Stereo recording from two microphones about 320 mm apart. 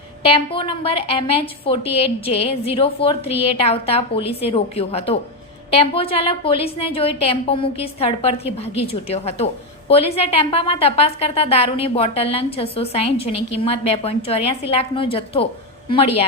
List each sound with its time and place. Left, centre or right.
0.2 s a woman's voice: centre